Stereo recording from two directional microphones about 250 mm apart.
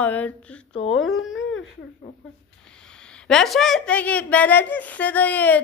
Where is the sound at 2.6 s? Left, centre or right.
Centre.